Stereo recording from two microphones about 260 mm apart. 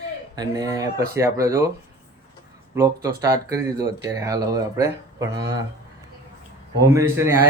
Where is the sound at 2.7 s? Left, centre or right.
Centre.